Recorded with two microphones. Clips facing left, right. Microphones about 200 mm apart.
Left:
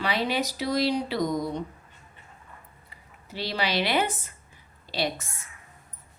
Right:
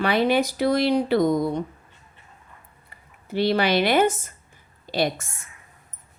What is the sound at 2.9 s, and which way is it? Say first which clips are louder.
A woman's voice: right 11 dB; 55° right (ahead or behind).